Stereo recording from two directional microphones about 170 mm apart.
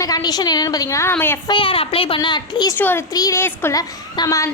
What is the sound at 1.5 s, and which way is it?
A woman's voice, 30° left (ahead or behind).